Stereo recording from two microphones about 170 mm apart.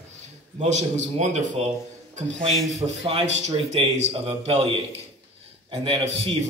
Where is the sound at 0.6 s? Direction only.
45° right (ahead or behind).